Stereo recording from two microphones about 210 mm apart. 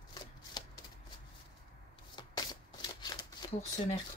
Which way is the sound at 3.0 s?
20° left (ahead or behind).